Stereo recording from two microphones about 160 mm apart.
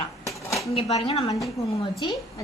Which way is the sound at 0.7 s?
40° left (ahead or behind).